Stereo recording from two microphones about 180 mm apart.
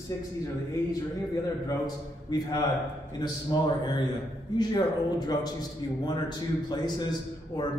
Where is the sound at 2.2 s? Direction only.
20° left (ahead or behind).